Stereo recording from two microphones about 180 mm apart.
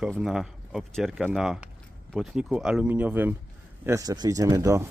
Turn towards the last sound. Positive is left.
turn(degrees=-20)  # may be behind; listen again after turning